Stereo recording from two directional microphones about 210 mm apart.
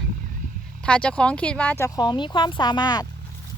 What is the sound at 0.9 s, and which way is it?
A woman's voice, 5° left (ahead or behind).